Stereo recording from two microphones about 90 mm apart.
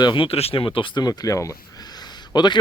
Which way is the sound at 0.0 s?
70° left (ahead or behind).